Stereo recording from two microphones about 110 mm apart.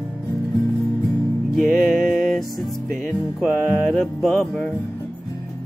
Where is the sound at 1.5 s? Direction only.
5° left (ahead or behind).